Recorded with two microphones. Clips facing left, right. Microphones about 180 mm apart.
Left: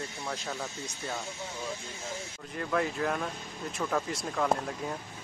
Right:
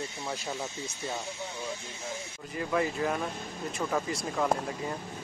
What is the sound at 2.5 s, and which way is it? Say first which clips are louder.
Speech: right 1 dB; centre (ahead or behind).